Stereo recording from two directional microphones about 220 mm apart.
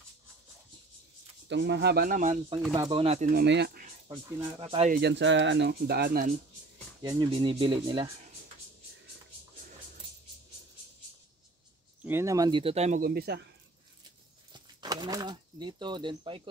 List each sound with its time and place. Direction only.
1.5 s speech: 50° right (ahead or behind); by 2.4 s 35° right (ahead or behind)
2.7 s speech: 20° right (ahead or behind)
3.3 s speech: 50° right (ahead or behind)
4.1 s speech: 15° right (ahead or behind)
4.6 s speech: 25° right (ahead or behind)
4.9 s speech: 50° right (ahead or behind)
7.0 s speech: 20° right (ahead or behind)
12.0 s speech: 10° right (ahead or behind); by 13.5 s 45° right (ahead or behind)
14.5 s speech: 20° right (ahead or behind)